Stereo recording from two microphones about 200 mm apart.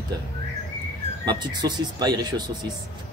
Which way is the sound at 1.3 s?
20° right (ahead or behind).